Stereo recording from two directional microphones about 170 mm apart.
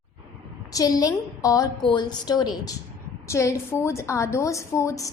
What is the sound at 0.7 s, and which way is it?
A woman's voice, 20° left (ahead or behind).